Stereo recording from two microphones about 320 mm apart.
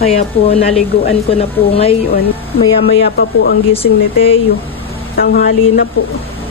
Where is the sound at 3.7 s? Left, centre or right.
Centre.